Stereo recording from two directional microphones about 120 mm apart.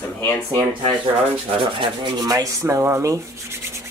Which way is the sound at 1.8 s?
35° right (ahead or behind).